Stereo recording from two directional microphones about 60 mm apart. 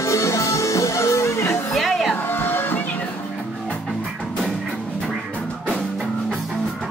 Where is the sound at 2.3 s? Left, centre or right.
Left.